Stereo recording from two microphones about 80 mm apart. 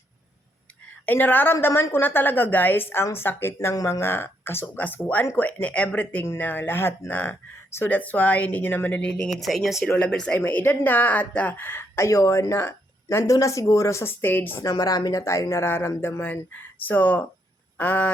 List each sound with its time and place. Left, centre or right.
1.0 s a woman's voice: left
9.0 s a woman's voice: centre
14.6 s a woman's voice: left